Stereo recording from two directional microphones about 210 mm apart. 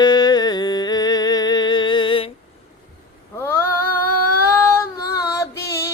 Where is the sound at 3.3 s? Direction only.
10° left (ahead or behind).